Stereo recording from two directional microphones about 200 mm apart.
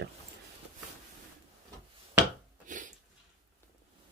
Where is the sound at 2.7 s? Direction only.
40° right (ahead or behind).